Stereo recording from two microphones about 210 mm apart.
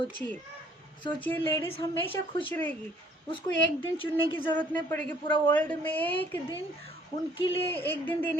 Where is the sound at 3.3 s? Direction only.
25° left (ahead or behind).